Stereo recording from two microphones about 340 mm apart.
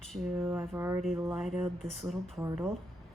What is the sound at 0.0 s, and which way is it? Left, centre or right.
Speech, centre.